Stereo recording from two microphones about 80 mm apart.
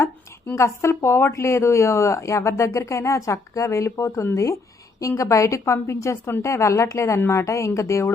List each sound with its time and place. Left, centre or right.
0.5 s a woman's voice: left